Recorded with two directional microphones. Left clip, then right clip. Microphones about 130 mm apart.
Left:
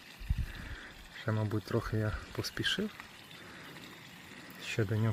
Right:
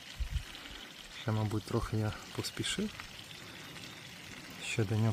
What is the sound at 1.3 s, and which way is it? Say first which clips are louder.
Speech: left 1 dB; 20° left (ahead or behind).